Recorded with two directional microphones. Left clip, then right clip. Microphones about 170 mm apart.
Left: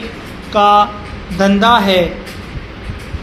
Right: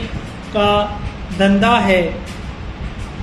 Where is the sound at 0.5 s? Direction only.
15° left (ahead or behind).